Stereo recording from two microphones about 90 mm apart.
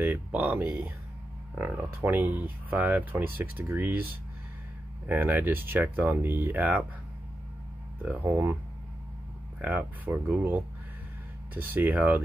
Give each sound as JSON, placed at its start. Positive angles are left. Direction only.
{"t": 0.0, "sound": "speech", "side_deg": -20}
{"t": 8.0, "sound": "speech", "side_deg": -20}
{"t": 9.6, "sound": "speech", "side_deg": -20}